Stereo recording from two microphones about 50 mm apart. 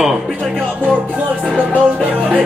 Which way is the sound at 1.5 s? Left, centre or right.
Right.